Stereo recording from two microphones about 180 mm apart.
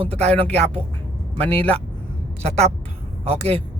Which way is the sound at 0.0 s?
35° right (ahead or behind).